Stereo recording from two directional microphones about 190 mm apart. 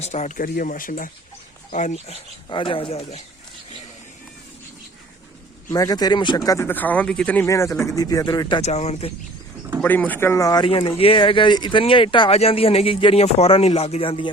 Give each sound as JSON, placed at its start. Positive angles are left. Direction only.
{"t": 0.0, "sound": "speech", "side_deg": 35}
{"t": 5.6, "sound": "speech", "side_deg": 20}
{"t": 9.8, "sound": "speech", "side_deg": 10}